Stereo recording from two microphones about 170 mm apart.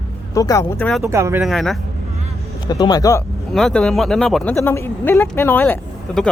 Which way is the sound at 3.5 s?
5° left (ahead or behind).